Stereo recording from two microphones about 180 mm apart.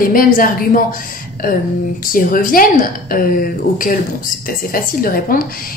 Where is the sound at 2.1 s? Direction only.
50° left (ahead or behind).